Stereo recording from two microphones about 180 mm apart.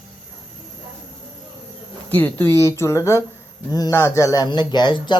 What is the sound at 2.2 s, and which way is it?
Speech, 10° left (ahead or behind).